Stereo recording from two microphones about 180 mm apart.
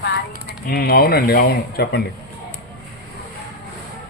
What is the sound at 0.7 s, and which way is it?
Speech, 60° left (ahead or behind).